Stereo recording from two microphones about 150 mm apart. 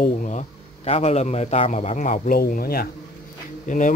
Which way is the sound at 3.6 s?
60° left (ahead or behind).